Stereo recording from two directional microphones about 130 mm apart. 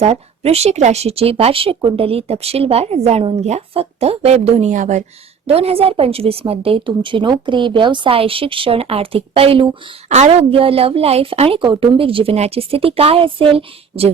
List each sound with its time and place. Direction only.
0.0 s speech: 55° right (ahead or behind)
4.7 s speech: 70° right (ahead or behind)
5.5 s speech: 50° right (ahead or behind)